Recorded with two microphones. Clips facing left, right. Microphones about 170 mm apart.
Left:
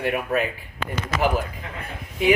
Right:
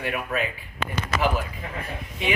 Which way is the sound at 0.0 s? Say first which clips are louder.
Left 4 dB; 40° left (ahead or behind).